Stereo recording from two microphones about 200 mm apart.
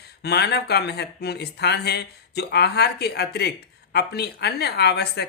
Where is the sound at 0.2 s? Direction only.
55° left (ahead or behind).